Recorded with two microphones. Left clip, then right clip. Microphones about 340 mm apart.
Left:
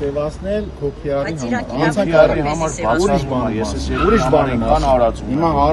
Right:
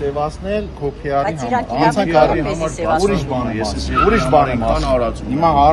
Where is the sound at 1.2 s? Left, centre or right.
Centre.